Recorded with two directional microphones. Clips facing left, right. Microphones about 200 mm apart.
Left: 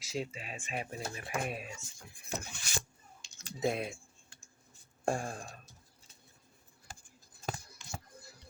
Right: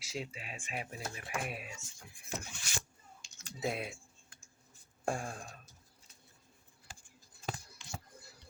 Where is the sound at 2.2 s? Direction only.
40° left (ahead or behind).